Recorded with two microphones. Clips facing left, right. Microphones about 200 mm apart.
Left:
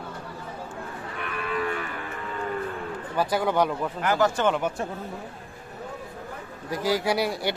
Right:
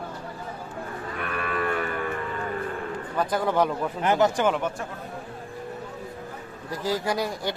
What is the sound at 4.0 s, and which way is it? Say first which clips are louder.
Speech: right 2 dB; 20° right (ahead or behind).